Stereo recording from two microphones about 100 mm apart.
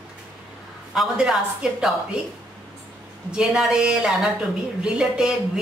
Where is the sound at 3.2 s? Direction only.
5° right (ahead or behind).